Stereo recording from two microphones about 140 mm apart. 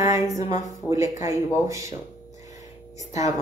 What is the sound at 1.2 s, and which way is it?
Speech, 25° right (ahead or behind).